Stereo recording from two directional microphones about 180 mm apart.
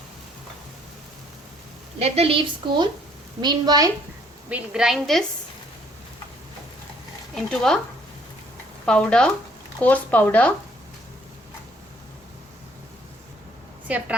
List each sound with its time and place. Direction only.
2.0 s a woman's voice: 35° right (ahead or behind)
4.4 s a woman's voice: 5° right (ahead or behind)
7.3 s a woman's voice: 5° left (ahead or behind)
8.9 s a woman's voice: 5° left (ahead or behind)
13.8 s a woman's voice: 5° right (ahead or behind)